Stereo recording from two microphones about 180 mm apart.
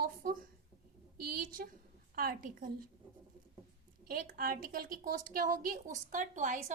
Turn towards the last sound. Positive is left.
turn(degrees=-45)  # may be behind; listen again after turning